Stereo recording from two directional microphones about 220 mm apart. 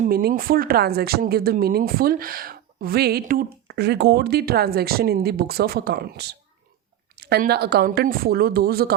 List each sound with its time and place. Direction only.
0.0 s speech: 40° right (ahead or behind)